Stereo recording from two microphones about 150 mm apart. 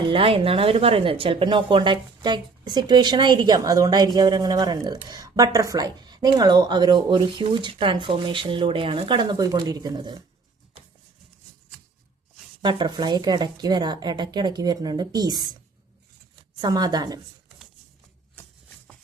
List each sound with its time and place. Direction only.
0.1 s speech: 35° right (ahead or behind)
12.6 s a woman's voice: 30° right (ahead or behind)